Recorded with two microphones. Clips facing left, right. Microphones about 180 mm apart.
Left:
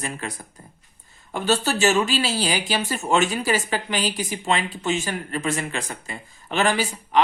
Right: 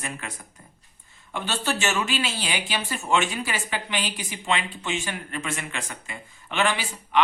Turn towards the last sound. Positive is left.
turn(degrees=40)  # may be behind; listen again after turning